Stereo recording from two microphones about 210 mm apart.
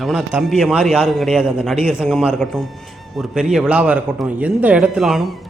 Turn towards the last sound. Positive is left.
turn(degrees=0)  # may be behind; listen again after turning